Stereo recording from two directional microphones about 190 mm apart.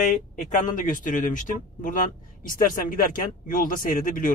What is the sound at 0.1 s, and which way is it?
A man's voice, 45° left (ahead or behind).